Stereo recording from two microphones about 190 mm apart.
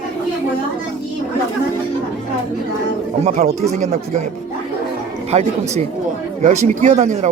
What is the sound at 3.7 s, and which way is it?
Speech, 35° right (ahead or behind).